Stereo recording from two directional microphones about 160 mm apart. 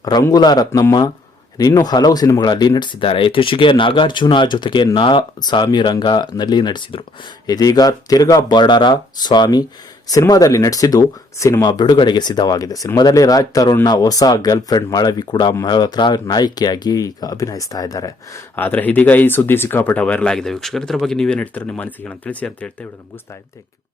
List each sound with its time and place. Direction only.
0.0 s speech: 20° left (ahead or behind)
18.5 s speech: 10° left (ahead or behind)